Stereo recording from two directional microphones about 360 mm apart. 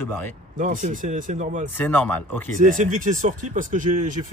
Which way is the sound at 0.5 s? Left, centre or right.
Right.